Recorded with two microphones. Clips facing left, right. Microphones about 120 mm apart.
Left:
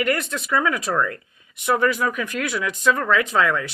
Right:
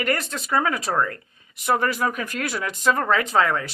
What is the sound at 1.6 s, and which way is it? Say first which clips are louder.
Speech: left 2 dB; 40° right (ahead or behind).